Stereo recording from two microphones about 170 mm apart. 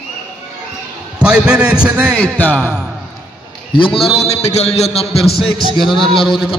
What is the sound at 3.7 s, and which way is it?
A man's voice, 30° left (ahead or behind).